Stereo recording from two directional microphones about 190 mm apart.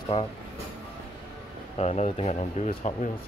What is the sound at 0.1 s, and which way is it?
Speech, 30° left (ahead or behind).